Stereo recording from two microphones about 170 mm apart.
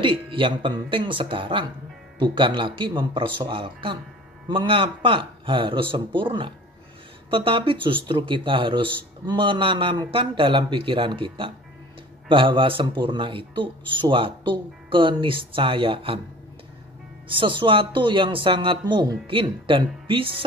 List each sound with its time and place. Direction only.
0.0 s speech: 30° right (ahead or behind)
17.3 s speech: 30° right (ahead or behind)